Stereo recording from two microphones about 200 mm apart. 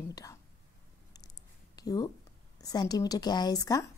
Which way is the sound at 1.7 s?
20° left (ahead or behind).